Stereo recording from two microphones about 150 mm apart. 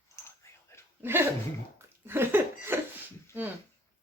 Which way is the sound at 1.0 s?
15° right (ahead or behind).